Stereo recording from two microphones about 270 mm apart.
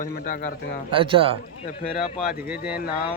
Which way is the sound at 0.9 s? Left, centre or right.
Centre.